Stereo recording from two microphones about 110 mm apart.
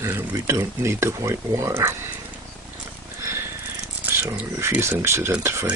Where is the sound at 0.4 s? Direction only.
25° right (ahead or behind).